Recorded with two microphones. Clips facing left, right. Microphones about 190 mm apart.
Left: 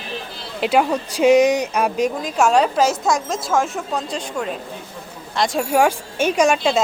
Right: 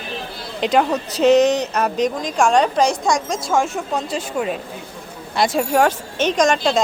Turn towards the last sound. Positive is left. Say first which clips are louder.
# even
turn(degrees=10)  # may be behind; listen again after turning